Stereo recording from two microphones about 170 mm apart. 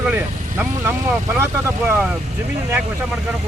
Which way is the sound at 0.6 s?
10° right (ahead or behind).